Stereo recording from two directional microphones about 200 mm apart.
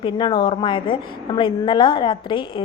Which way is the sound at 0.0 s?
20° left (ahead or behind).